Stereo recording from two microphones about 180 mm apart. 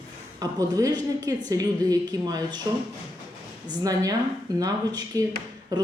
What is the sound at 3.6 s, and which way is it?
Speech, 20° right (ahead or behind).